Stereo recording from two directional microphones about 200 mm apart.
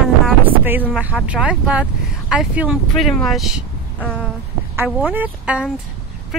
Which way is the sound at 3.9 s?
5° left (ahead or behind).